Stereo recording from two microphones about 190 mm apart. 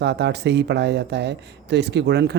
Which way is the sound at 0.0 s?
65° right (ahead or behind).